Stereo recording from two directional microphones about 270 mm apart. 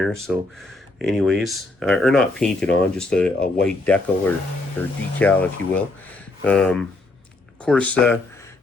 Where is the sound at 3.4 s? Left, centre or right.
Left.